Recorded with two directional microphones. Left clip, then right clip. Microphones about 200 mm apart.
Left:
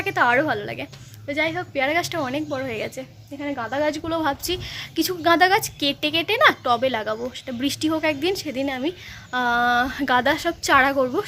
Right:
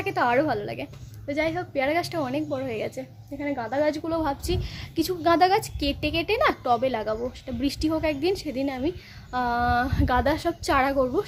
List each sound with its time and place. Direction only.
0.0 s a woman's voice: 5° right (ahead or behind)